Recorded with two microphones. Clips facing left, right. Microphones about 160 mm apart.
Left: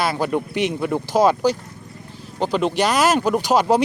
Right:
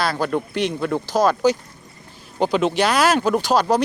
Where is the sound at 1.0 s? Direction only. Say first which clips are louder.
Left 2 dB; 25° left (ahead or behind).